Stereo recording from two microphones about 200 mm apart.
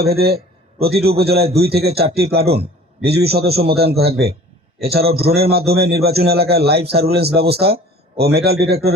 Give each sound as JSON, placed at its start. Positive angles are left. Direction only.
{"t": 0.0, "sound": "a man's voice", "side_deg": -50}